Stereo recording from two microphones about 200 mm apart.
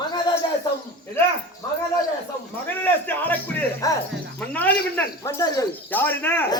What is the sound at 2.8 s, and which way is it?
Speech, 10° left (ahead or behind).